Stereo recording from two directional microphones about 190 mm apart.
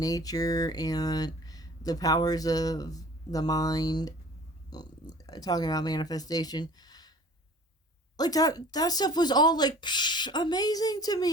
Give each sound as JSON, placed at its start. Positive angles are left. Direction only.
{"t": 0.0, "sound": "speech", "side_deg": 20}
{"t": 8.1, "sound": "speech", "side_deg": 20}